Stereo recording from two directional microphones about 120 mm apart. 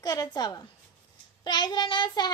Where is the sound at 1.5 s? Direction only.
35° left (ahead or behind).